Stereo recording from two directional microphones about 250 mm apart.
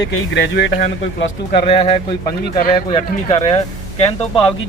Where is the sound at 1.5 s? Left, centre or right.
Left.